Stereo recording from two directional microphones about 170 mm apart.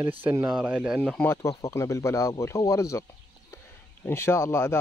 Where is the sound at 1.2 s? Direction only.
15° left (ahead or behind).